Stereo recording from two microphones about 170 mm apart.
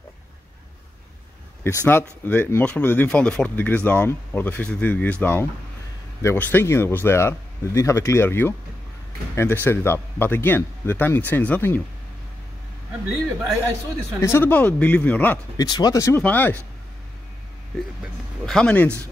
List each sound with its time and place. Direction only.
1.6 s speech: 15° left (ahead or behind)
14.2 s speech: 15° left (ahead or behind)
15.5 s speech: 25° left (ahead or behind)
18.4 s speech: 5° left (ahead or behind)